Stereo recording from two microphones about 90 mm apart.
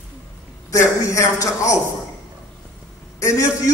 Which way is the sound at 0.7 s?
35° left (ahead or behind).